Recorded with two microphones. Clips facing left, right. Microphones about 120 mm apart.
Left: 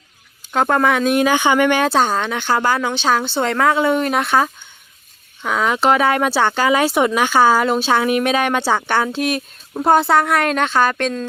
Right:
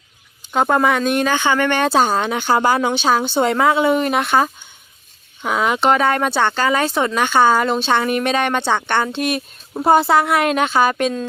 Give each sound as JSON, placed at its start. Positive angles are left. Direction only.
{"t": 0.5, "sound": "speech", "side_deg": -5}
{"t": 1.9, "sound": "a woman's voice", "side_deg": -10}